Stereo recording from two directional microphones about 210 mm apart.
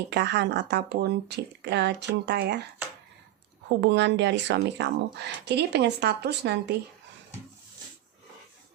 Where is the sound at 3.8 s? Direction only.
55° right (ahead or behind).